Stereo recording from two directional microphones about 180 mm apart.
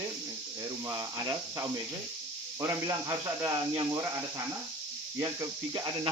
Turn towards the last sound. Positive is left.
turn(degrees=-25)  # may be behind; listen again after turning